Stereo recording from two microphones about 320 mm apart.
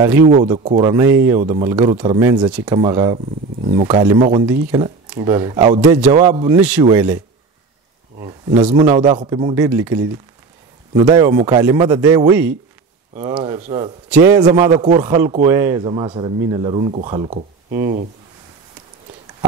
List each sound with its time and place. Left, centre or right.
0.3 s speech: centre
4.5 s speech: centre
8.2 s a man's voice: centre